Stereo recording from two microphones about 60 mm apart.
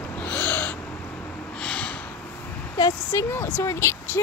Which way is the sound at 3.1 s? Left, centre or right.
Left.